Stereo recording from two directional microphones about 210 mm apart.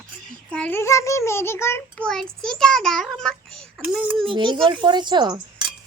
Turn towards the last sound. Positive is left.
turn(degrees=-20)  # may be behind; listen again after turning